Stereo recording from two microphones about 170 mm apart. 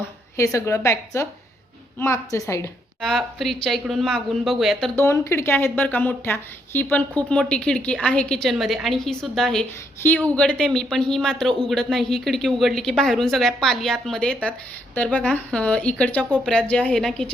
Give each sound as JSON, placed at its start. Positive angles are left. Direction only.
{"t": 0.0, "sound": "a woman's voice", "side_deg": 20}
{"t": 3.0, "sound": "a man's voice", "side_deg": 0}
{"t": 4.9, "sound": "a woman's voice", "side_deg": 15}